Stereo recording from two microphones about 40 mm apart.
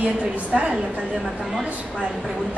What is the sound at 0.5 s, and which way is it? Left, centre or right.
Speech, centre.